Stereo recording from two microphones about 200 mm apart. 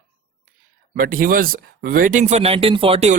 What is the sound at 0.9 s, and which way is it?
Speech, 45° right (ahead or behind).